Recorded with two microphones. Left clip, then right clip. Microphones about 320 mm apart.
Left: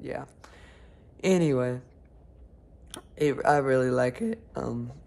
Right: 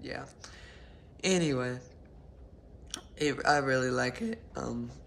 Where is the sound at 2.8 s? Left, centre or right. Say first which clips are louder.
Left 5 dB; centre.